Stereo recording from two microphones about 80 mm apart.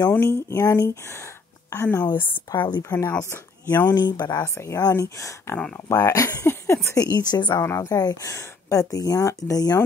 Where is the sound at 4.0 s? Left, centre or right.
Left.